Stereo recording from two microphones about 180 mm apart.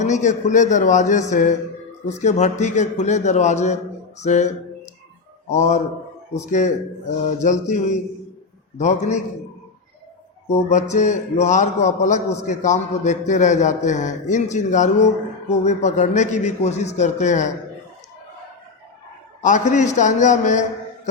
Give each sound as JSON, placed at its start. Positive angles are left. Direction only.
{"t": 0.0, "sound": "a man's voice", "side_deg": 40}
{"t": 10.5, "sound": "a man's voice", "side_deg": 40}
{"t": 19.4, "sound": "a man's voice", "side_deg": 45}